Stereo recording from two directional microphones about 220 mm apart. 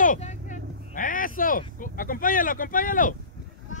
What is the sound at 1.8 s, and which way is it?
Speech, 40° left (ahead or behind).